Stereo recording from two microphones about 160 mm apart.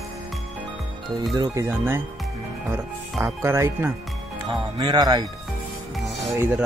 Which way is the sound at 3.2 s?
15° right (ahead or behind).